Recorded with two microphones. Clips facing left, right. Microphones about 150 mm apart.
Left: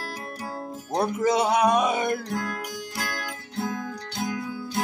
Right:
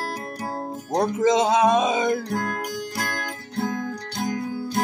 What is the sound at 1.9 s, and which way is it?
Speech, 90° right.